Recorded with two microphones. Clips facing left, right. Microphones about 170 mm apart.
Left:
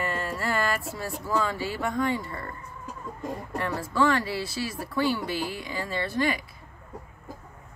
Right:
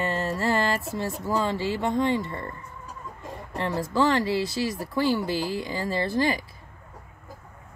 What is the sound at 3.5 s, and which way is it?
Speech, 30° right (ahead or behind).